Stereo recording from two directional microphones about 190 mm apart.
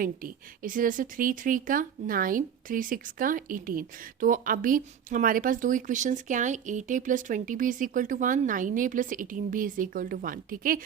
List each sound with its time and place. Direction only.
0.0 s speech: 45° right (ahead or behind)